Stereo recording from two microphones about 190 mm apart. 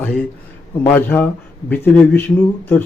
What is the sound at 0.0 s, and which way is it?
A man's voice, 5° left (ahead or behind).